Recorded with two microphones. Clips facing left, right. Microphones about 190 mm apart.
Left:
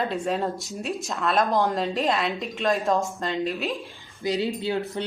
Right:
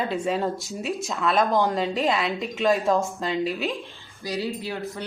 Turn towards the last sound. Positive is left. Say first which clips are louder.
# left 4 dB
turn(degrees=25)  # may be behind; listen again after turning